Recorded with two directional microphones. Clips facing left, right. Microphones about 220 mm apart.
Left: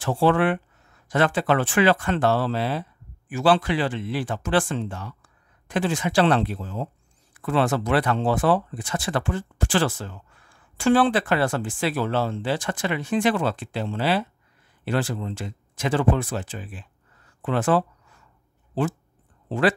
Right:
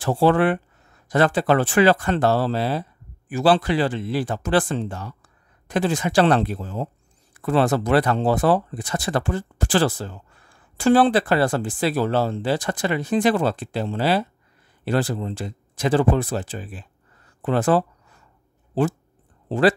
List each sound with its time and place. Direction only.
0.0 s speech: 35° right (ahead or behind)
17.4 s a sound: 40° right (ahead or behind)
18.8 s speech: 40° right (ahead or behind)